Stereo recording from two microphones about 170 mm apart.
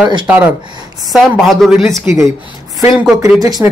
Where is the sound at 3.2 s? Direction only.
20° right (ahead or behind).